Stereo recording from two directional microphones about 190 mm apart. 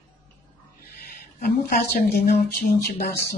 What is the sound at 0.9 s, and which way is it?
Speech, 55° left (ahead or behind).